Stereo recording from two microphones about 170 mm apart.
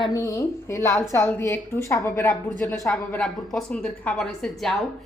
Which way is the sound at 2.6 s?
5° left (ahead or behind).